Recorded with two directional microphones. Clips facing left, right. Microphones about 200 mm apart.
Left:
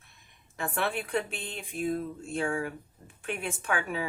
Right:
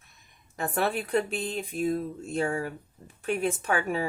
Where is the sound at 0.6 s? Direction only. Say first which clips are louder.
Right 3 dB; 40° right (ahead or behind).